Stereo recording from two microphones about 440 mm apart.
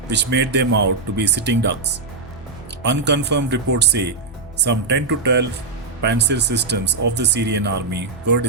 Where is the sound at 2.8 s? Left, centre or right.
Right.